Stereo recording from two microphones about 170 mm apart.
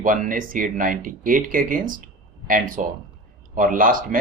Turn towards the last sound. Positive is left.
turn(degrees=-50)  # may be behind; listen again after turning